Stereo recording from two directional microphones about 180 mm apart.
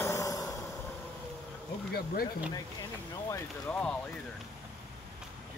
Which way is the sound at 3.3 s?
10° left (ahead or behind).